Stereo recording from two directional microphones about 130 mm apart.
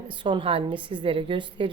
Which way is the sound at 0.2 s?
40° right (ahead or behind).